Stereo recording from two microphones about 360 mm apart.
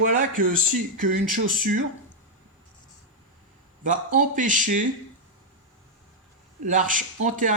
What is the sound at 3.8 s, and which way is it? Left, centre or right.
Speech, right.